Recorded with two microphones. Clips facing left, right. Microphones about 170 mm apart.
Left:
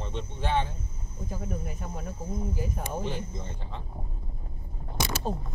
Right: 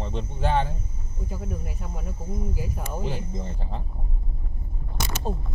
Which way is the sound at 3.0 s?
40° right (ahead or behind).